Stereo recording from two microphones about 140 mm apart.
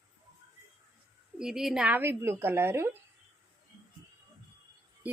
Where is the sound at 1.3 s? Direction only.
5° right (ahead or behind).